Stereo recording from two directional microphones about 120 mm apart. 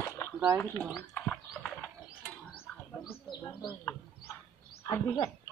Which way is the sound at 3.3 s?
35° left (ahead or behind).